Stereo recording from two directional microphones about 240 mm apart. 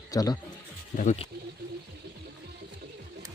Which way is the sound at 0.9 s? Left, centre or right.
Left.